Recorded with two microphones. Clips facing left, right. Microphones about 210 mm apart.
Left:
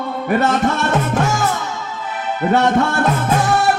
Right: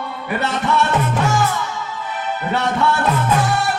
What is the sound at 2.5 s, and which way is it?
Music, 45° left (ahead or behind).